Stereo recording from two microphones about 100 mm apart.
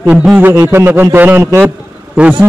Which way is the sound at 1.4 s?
30° right (ahead or behind).